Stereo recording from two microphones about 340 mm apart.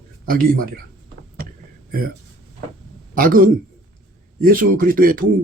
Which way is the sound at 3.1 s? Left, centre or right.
Right.